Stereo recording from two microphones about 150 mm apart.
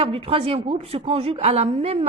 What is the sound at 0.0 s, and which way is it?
A woman's voice, 40° right (ahead or behind).